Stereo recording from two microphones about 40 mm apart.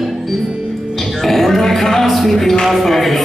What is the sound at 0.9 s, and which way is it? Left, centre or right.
Music, centre.